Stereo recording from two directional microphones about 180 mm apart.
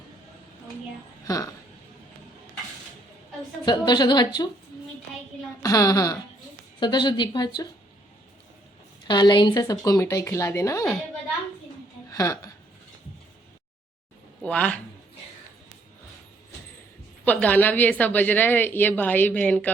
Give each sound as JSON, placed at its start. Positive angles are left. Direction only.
{"t": 1.2, "sound": "speech", "side_deg": 20}
{"t": 3.7, "sound": "a woman's voice", "side_deg": 25}
{"t": 5.6, "sound": "a woman's voice", "side_deg": 20}
{"t": 9.0, "sound": "a woman's voice", "side_deg": 25}
{"t": 12.1, "sound": "speech", "side_deg": 20}
{"t": 14.4, "sound": "a woman's voice", "side_deg": 5}
{"t": 17.2, "sound": "a woman's voice", "side_deg": 10}